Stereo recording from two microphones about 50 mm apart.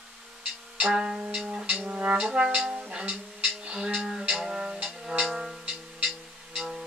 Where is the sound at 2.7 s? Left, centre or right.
Right.